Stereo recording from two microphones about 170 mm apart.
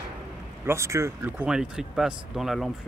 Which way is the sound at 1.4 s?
5° right (ahead or behind).